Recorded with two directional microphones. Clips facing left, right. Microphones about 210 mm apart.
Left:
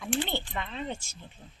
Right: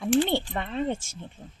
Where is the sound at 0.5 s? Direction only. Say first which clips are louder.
Right 7 dB; 45° right (ahead or behind).